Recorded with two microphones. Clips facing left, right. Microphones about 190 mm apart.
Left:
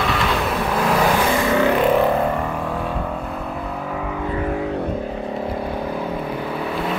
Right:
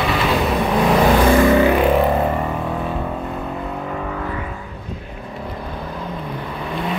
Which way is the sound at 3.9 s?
5° left (ahead or behind).